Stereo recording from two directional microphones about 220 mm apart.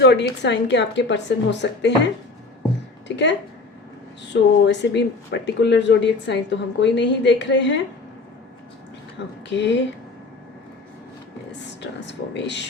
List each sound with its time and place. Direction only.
0.0 s a woman's voice: 50° left (ahead or behind)
3.1 s speech: 50° left (ahead or behind)
4.3 s speech: 55° left (ahead or behind)
9.5 s speech: 55° left (ahead or behind)
11.8 s speech: 50° left (ahead or behind)